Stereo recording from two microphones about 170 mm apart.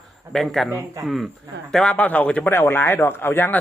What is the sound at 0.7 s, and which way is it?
Speech, 20° right (ahead or behind).